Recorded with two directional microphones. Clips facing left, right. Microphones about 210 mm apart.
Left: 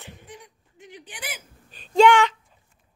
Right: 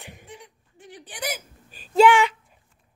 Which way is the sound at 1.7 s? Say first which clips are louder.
Even; 5° right (ahead or behind).